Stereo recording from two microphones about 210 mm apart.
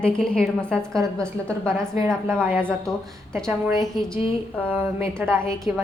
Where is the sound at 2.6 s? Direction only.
5° left (ahead or behind).